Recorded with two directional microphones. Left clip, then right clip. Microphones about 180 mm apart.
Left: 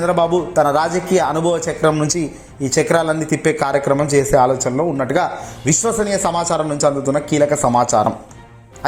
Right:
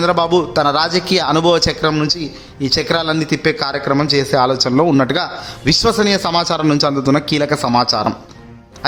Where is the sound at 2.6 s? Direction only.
15° right (ahead or behind).